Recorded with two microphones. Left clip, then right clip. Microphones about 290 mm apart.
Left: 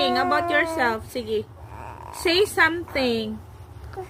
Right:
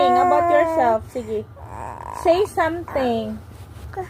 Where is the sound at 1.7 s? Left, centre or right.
Centre.